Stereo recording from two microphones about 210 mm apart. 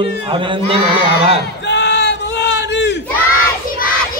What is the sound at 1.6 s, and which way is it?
Crowd, 55° left (ahead or behind).